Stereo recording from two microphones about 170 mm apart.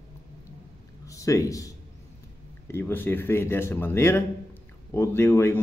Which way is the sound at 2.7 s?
10° left (ahead or behind).